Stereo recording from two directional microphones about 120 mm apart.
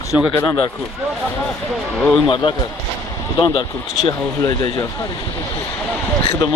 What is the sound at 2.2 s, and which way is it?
Speech, 40° left (ahead or behind).